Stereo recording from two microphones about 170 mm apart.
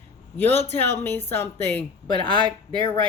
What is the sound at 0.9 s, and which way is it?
Speech, 10° left (ahead or behind).